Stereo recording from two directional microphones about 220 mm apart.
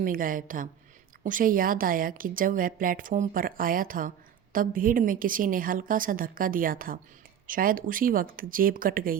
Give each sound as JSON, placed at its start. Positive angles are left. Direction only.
{"t": 0.0, "sound": "a woman's voice", "side_deg": -40}